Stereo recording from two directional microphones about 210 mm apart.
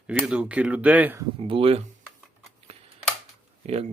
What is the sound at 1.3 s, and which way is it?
Speech, 25° right (ahead or behind).